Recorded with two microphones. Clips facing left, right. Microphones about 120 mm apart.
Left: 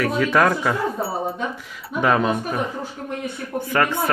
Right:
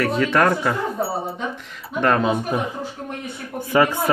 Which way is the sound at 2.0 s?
5° left (ahead or behind).